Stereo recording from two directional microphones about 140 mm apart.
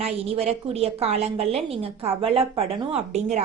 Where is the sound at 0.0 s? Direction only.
45° right (ahead or behind).